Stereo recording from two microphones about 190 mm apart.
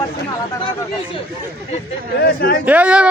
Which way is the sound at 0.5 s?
15° left (ahead or behind).